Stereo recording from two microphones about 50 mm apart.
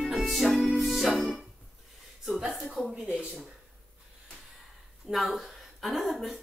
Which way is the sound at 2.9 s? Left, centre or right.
Right.